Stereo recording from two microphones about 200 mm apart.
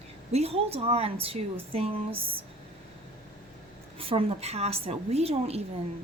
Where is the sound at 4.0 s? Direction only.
30° right (ahead or behind).